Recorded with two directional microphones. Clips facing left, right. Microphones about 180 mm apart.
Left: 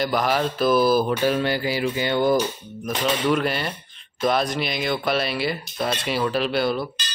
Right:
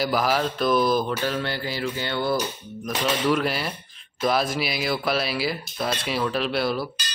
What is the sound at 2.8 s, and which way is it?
Speech, centre (ahead or behind).